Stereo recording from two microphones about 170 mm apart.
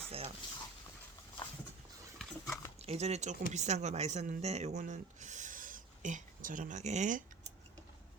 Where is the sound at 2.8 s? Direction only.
40° right (ahead or behind).